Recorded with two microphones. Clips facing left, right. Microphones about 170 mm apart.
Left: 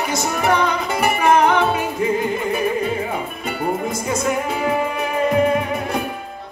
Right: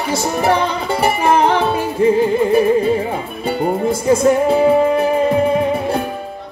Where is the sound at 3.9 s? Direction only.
30° right (ahead or behind).